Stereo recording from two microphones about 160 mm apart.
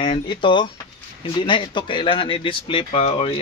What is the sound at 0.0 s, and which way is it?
Speech, 35° left (ahead or behind).